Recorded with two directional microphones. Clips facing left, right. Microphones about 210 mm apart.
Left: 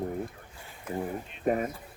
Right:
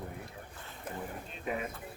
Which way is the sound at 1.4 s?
45° left (ahead or behind).